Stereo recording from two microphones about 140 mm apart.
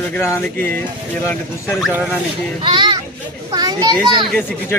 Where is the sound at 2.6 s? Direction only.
35° right (ahead or behind).